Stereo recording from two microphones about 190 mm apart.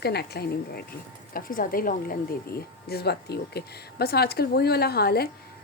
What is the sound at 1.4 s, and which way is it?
A woman's voice, 45° left (ahead or behind).